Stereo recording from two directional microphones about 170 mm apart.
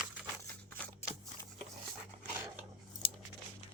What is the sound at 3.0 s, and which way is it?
Scissors, 35° left (ahead or behind).